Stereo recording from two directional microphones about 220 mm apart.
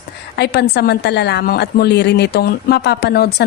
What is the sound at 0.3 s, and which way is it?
A woman's voice, 50° left (ahead or behind).